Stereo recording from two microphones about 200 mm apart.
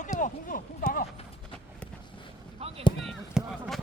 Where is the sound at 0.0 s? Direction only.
40° left (ahead or behind).